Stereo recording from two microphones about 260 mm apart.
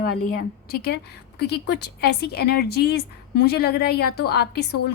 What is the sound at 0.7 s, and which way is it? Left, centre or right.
A woman's voice, left.